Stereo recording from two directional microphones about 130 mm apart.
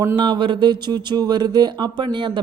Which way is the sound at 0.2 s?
40° right (ahead or behind).